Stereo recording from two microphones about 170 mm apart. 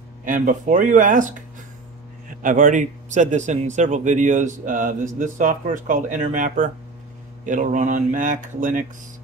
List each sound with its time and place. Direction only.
0.2 s a man's voice: 50° right (ahead or behind)
2.4 s a man's voice: 50° right (ahead or behind)